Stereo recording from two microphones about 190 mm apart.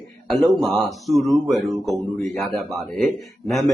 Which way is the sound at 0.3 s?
Centre (ahead or behind).